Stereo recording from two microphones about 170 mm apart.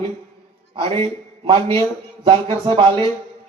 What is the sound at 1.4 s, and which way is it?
A man's voice, 30° right (ahead or behind).